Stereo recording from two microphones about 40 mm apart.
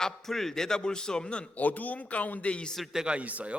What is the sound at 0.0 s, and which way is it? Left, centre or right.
A man's voice, centre.